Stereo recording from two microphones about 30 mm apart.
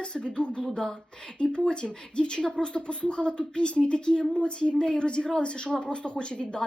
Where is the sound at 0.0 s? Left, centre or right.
Left.